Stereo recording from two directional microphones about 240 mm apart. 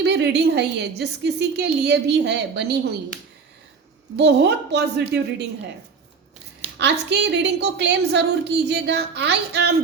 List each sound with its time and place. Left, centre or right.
0.0 s a woman's voice: right
4.2 s a woman's voice: right
6.7 s a woman's voice: right